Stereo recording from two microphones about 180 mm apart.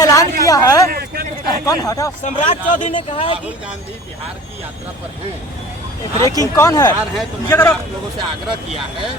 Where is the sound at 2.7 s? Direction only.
45° left (ahead or behind).